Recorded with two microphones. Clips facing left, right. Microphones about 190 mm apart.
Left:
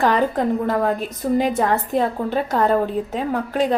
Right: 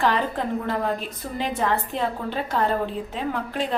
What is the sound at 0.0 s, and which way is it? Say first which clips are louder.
A woman's voice: left 5 dB; 45° left (ahead or behind).